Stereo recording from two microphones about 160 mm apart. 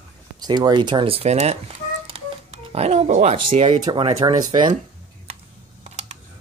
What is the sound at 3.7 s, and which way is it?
Speech, 30° right (ahead or behind).